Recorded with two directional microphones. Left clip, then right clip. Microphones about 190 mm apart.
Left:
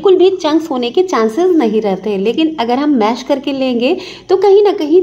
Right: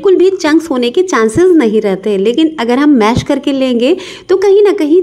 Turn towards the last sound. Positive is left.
turn(degrees=-35)  # may be behind; listen again after turning